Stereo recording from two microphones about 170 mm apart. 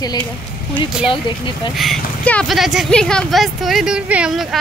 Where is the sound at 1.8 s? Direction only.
5° left (ahead or behind).